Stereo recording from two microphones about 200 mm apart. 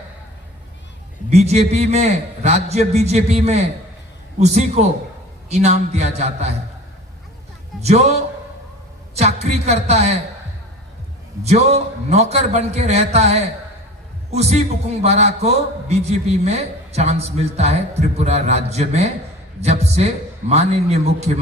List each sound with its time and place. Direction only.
1.3 s a man's voice: 35° right (ahead or behind)
7.8 s a man's voice: 35° right (ahead or behind)
9.1 s a man's voice: 35° right (ahead or behind)
11.4 s a man's voice: 30° right (ahead or behind)